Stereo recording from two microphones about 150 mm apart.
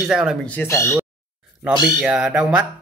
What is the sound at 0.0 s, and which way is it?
Speech, 5° right (ahead or behind).